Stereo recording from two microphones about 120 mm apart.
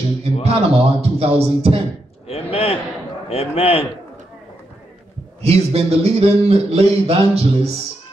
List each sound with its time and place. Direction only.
0.2 s speech: 55° right (ahead or behind)
2.2 s a sound: 55° left (ahead or behind)
3.3 s a man's voice: 55° left (ahead or behind)
5.4 s speech: 60° right (ahead or behind)